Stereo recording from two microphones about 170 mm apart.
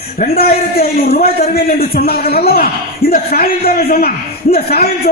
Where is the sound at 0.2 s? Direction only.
65° left (ahead or behind).